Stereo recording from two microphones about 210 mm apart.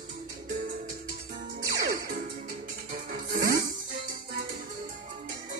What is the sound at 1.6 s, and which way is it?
Music, 45° right (ahead or behind).